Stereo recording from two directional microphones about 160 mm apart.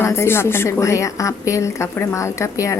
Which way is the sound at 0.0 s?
15° left (ahead or behind).